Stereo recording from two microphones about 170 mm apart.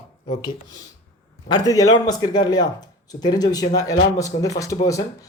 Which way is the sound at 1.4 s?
25° left (ahead or behind).